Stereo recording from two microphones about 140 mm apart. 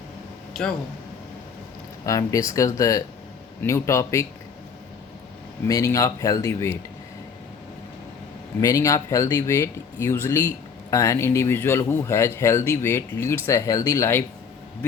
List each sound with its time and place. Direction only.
0.5 s speech: 5° left (ahead or behind)
2.0 s speech: 25° left (ahead or behind)
5.6 s speech: 25° left (ahead or behind)
8.6 s speech: 25° left (ahead or behind)